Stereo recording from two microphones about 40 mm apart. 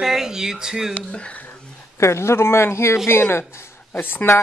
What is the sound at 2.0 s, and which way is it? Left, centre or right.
A man's voice, left.